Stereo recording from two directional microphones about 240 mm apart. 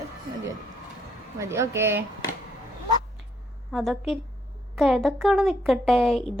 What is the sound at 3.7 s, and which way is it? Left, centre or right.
Speech, centre.